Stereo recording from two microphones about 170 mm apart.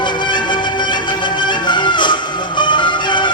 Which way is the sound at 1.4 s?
25° left (ahead or behind).